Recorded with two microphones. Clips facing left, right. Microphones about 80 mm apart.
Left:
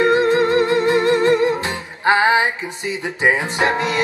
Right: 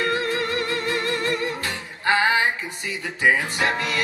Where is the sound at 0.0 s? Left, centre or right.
Left.